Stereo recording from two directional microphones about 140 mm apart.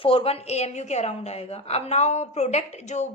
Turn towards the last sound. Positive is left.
turn(degrees=55)  # may be behind; listen again after turning